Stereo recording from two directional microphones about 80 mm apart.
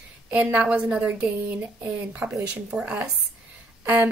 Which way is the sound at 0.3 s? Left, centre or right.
Centre.